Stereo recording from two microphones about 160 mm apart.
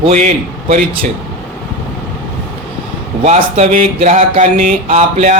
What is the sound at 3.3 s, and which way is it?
Speech, 45° right (ahead or behind).